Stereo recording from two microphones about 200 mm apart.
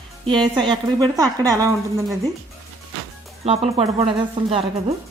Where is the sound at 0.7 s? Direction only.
20° right (ahead or behind).